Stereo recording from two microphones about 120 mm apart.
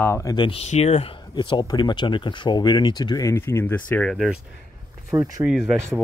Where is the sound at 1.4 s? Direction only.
40° left (ahead or behind).